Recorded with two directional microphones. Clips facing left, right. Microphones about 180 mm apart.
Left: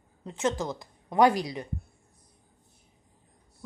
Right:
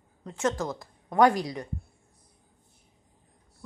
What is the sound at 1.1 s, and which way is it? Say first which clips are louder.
Speech: even; 25° left (ahead or behind).